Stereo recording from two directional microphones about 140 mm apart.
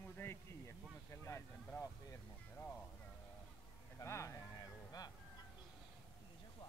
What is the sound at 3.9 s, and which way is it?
Speech, 20° left (ahead or behind).